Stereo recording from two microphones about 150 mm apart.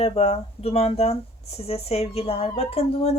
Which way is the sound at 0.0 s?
40° left (ahead or behind).